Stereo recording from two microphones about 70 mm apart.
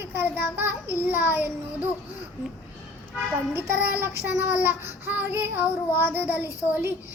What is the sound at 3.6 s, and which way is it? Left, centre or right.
Child singing, right.